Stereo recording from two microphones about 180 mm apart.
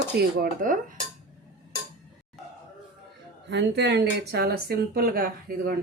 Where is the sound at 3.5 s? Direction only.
70° right (ahead or behind).